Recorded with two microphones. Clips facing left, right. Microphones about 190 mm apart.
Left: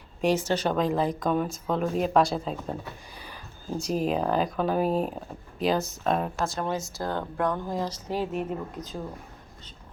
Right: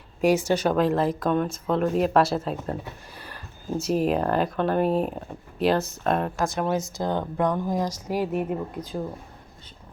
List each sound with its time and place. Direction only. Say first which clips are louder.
0.2 s speech: right 4 dB; 10° right (ahead or behind)
6.4 s speech: right 4 dB; 10° right (ahead or behind)